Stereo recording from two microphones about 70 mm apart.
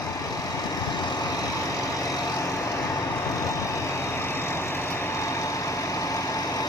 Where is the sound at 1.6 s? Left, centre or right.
Left.